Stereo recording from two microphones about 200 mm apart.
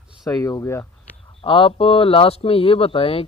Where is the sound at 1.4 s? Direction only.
25° left (ahead or behind).